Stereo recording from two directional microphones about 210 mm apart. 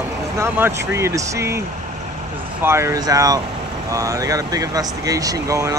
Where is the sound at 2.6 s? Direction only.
10° right (ahead or behind).